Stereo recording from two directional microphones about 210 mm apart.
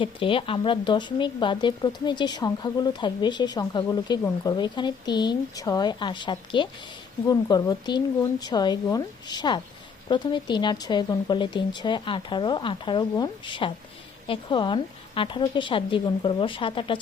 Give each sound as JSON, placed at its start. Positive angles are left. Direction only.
{"t": 0.0, "sound": "speech", "side_deg": 25}